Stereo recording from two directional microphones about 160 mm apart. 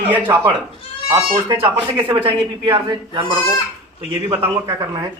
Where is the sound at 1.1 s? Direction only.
30° right (ahead or behind).